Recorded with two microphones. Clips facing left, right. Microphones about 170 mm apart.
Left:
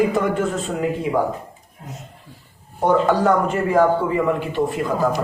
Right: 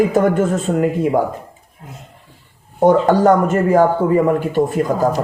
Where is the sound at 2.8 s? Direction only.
45° right (ahead or behind).